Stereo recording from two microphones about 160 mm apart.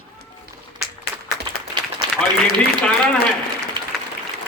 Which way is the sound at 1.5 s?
30° right (ahead or behind).